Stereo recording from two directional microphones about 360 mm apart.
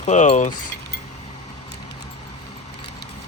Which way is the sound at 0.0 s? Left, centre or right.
Centre.